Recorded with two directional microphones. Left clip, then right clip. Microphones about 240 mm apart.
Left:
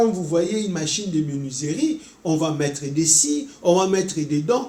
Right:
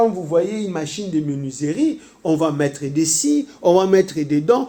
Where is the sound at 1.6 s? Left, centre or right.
Right.